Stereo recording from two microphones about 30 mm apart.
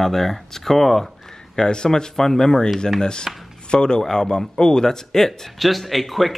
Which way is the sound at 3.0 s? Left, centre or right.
Left.